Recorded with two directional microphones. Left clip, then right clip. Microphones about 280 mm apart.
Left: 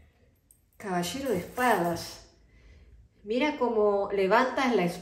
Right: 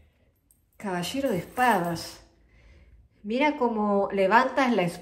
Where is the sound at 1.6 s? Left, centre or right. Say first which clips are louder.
Right 3 dB; right.